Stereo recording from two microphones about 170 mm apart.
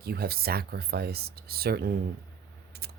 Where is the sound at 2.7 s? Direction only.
70° right (ahead or behind).